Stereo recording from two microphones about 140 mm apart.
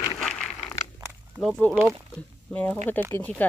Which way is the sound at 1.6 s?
10° left (ahead or behind).